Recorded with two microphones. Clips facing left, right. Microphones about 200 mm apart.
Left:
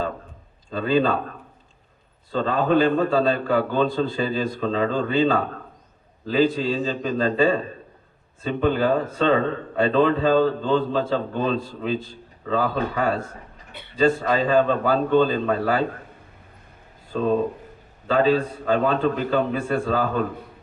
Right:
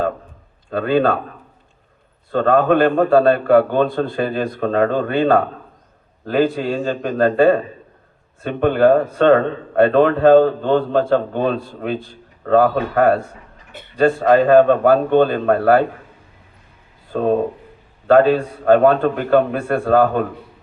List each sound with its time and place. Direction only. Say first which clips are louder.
0.7 s a man's voice: right 4 dB; 60° right (ahead or behind)
2.3 s a man's voice: right 6 dB; 60° right (ahead or behind)
17.1 s a man's voice: right 4 dB; 55° right (ahead or behind)